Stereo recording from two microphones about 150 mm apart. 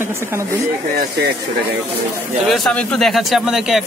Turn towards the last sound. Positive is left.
turn(degrees=-5)  # may be behind; listen again after turning